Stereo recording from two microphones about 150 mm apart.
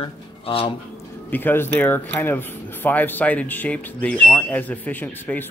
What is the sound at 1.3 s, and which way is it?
Speech, 15° left (ahead or behind).